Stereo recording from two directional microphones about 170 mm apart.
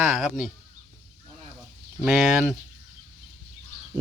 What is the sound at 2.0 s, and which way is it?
Speech, 5° right (ahead or behind).